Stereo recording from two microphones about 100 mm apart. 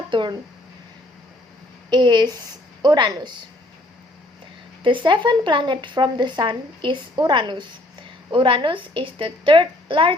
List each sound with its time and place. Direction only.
0.1 s speech: 50° right (ahead or behind)
1.9 s speech: 45° right (ahead or behind)
4.8 s speech: 55° right (ahead or behind)
8.3 s a woman's voice: 60° right (ahead or behind)